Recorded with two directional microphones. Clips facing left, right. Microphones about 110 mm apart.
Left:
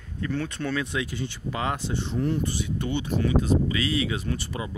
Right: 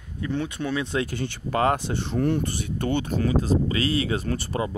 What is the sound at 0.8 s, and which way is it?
Speech, 35° right (ahead or behind).